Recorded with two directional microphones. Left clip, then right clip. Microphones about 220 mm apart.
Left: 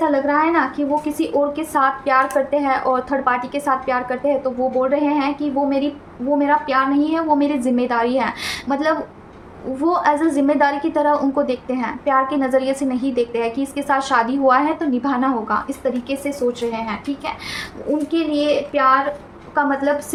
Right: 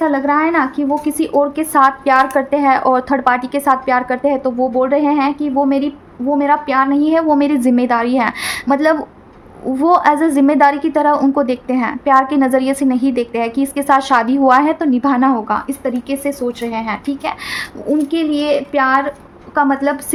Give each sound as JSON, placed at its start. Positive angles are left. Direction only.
{"t": 0.0, "sound": "a woman's voice", "side_deg": -35}